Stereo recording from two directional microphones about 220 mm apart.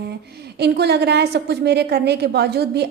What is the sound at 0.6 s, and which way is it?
A woman's voice, 50° right (ahead or behind).